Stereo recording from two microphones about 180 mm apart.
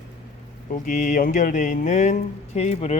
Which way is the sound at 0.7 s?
45° left (ahead or behind).